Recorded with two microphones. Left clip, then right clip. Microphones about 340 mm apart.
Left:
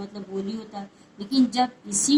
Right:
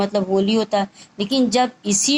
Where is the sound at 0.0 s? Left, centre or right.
Right.